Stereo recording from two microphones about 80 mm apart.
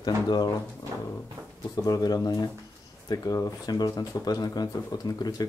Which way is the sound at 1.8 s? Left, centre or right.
Left.